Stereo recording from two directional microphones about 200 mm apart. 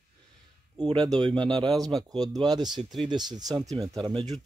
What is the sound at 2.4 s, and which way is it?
Speech, 20° right (ahead or behind).